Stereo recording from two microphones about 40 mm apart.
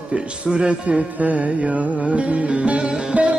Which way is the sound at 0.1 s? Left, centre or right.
Right.